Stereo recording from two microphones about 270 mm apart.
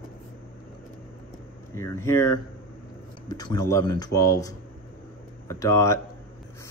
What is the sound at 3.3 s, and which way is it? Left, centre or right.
Speech, centre.